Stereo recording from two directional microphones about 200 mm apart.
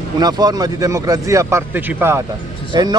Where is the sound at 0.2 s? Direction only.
20° right (ahead or behind).